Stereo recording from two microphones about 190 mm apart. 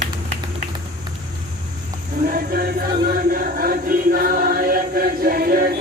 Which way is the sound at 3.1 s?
50° right (ahead or behind).